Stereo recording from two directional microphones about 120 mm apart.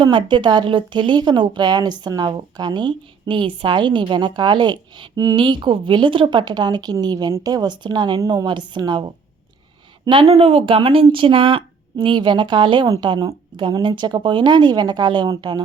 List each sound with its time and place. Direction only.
0.0 s a woman's voice: 45° right (ahead or behind)
10.1 s a woman's voice: 50° right (ahead or behind)